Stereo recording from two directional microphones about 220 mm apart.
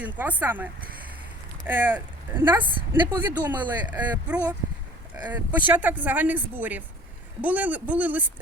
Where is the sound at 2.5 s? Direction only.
20° right (ahead or behind).